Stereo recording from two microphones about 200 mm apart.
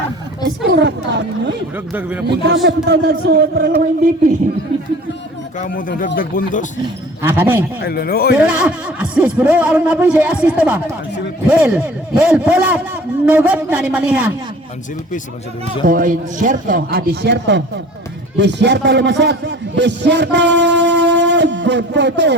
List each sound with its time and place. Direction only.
0.8 s speech: 60° right (ahead or behind)
1.7 s speech: 10° right (ahead or behind)
2.6 s a man's voice: 55° right (ahead or behind)
5.5 s speech: 40° left (ahead or behind)
7.2 s speech: 10° right (ahead or behind)
7.8 s speech: 50° left (ahead or behind)
8.4 s a man's voice: 5° right (ahead or behind)
15.9 s a man's voice: 40° right (ahead or behind); by 22.4 s 60° right (ahead or behind)